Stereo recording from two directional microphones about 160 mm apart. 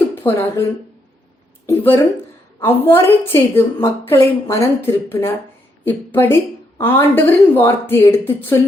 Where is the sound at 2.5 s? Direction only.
15° left (ahead or behind).